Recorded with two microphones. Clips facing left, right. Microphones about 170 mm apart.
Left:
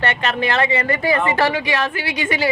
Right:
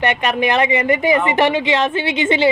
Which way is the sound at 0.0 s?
15° right (ahead or behind).